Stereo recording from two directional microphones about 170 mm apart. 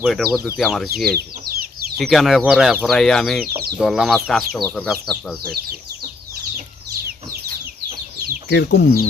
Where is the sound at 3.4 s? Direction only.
60° right (ahead or behind).